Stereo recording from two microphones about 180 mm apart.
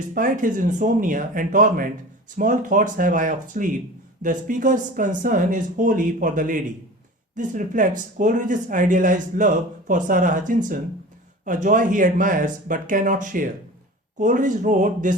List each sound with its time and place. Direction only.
0.1 s speech: 45° right (ahead or behind)